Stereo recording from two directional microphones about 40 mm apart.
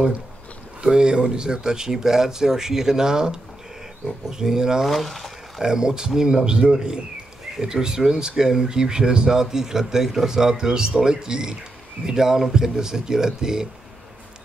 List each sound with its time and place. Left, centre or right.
0.8 s speech: right
4.8 s speech: centre
5.6 s speech: centre